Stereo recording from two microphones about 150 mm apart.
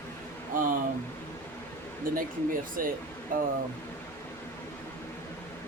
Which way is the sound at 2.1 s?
65° right (ahead or behind).